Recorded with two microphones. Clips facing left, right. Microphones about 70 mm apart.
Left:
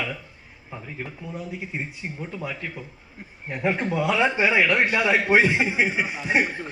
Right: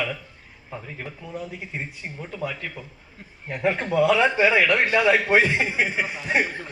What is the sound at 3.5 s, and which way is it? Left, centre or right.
A man's voice, centre.